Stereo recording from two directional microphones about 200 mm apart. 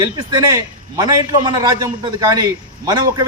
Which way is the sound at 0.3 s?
20° right (ahead or behind).